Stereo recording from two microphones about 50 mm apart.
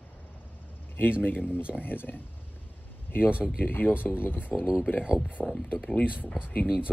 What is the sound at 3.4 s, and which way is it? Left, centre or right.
Speech, left.